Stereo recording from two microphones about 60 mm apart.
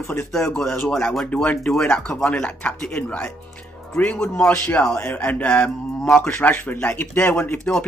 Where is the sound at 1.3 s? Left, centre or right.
Left.